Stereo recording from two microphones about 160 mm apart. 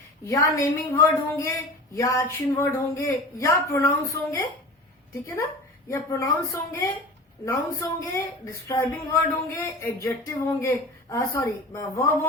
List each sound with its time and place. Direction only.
0.3 s a woman's voice: 20° left (ahead or behind)
5.9 s a woman's voice: 20° left (ahead or behind)